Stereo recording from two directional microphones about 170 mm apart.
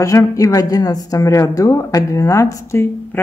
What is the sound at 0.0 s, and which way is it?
A woman's voice, 20° left (ahead or behind).